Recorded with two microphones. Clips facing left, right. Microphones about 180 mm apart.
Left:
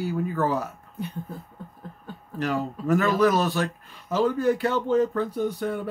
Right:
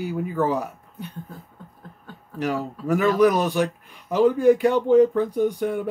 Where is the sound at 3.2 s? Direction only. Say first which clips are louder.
Right 3 dB; 15° right (ahead or behind).